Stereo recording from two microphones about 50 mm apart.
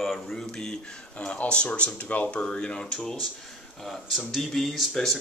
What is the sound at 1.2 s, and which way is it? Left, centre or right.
Speech, left.